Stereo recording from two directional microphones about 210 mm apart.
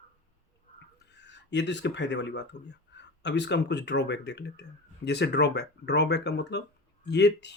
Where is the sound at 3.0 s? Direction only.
55° left (ahead or behind).